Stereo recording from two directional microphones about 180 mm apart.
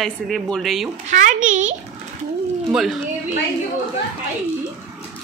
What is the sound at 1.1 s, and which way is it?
Speech, 45° right (ahead or behind).